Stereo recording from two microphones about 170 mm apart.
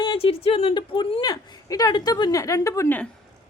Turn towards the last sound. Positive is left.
turn(degrees=15)  # may be behind; listen again after turning